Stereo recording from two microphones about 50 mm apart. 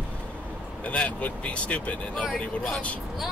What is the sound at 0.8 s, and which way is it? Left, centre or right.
A man's voice, left.